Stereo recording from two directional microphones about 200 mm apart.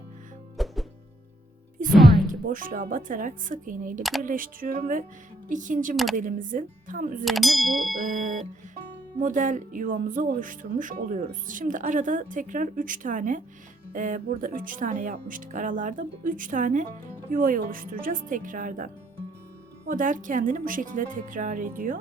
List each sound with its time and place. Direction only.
0.5 s music: centre (ahead or behind)
2.2 s speech: 45° right (ahead or behind)
7.3 s ding: centre (ahead or behind)
7.9 s speech: 40° right (ahead or behind)
19.9 s speech: 40° right (ahead or behind)